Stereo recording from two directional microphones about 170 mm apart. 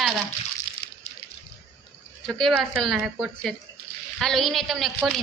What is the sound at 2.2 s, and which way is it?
A woman's voice, centre (ahead or behind).